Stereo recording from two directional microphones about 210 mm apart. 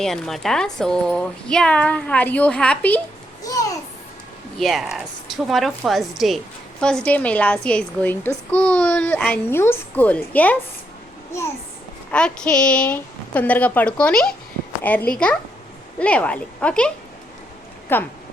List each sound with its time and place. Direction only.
0.0 s speech: centre (ahead or behind)
3.4 s a sound: 15° left (ahead or behind)
4.5 s speech: centre (ahead or behind)
11.3 s a sound: 15° left (ahead or behind)
12.1 s speech: 5° left (ahead or behind)
17.9 s speech: 10° left (ahead or behind)